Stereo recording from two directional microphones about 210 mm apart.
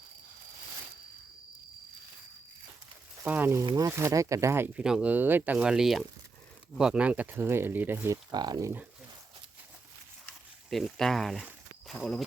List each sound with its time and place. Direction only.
3.2 s speech: 10° right (ahead or behind)
10.7 s speech: centre (ahead or behind)